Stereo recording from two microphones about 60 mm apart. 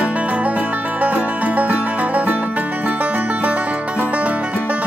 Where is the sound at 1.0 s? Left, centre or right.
Right.